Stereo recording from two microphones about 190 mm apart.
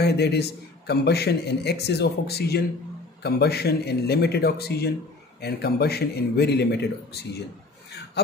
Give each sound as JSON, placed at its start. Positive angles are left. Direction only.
{"t": 0.0, "sound": "a man's voice", "side_deg": 60}